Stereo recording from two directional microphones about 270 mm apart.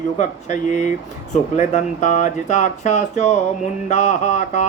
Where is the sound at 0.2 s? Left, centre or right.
Left.